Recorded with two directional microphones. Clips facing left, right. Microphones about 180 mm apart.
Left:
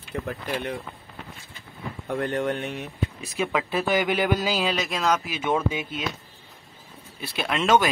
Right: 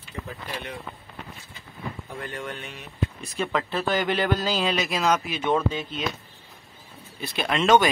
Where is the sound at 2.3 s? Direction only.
45° left (ahead or behind).